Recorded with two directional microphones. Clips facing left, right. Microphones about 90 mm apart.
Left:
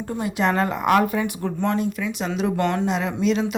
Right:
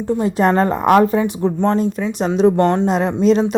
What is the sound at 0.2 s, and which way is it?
A woman's voice, 35° right (ahead or behind).